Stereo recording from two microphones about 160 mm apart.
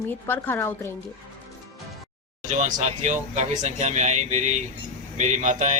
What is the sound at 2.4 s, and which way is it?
Speech, 50° right (ahead or behind).